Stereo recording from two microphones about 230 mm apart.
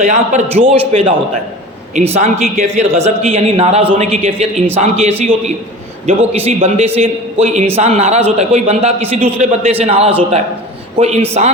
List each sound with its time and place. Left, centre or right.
0.0 s a man's voice: right
2.1 s a man's voice: right